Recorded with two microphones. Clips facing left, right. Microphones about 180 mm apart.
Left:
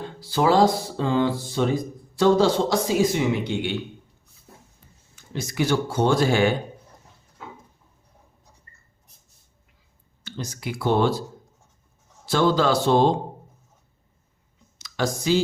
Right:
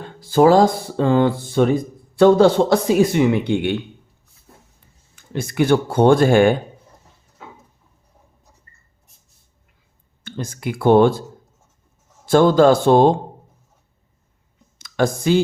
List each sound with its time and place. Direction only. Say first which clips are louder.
0.0 s speech: right 8 dB; 50° right (ahead or behind)
5.1 s speech: right 6 dB; 55° right (ahead or behind)
10.2 s speech: right 5 dB; 50° right (ahead or behind)
12.2 s speech: right 8 dB; 50° right (ahead or behind)
14.8 s a sound: right 6 dB; 55° right (ahead or behind)